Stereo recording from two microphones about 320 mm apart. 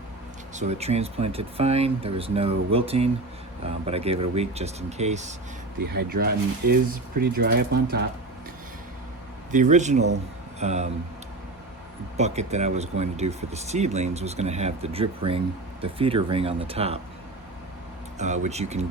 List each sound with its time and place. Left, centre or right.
0.5 s speech: right
9.5 s speech: right
12.1 s speech: right
18.4 s speech: right